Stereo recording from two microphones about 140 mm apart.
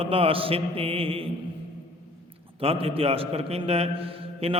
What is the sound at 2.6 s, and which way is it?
A man's voice, 45° right (ahead or behind).